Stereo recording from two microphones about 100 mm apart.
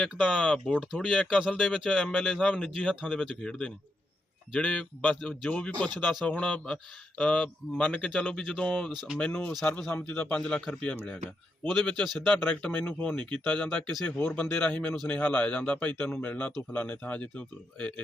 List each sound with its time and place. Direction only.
0.0 s speech: 10° left (ahead or behind)
5.5 s speech: 15° left (ahead or behind)
8.9 s speech: 5° right (ahead or behind)
9.1 s speech: 15° left (ahead or behind)